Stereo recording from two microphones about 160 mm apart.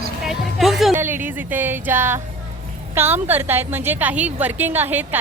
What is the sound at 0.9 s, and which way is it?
A woman's voice, 15° right (ahead or behind).